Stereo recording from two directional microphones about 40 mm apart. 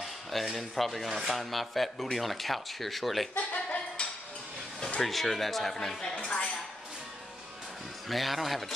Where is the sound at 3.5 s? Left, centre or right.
Left.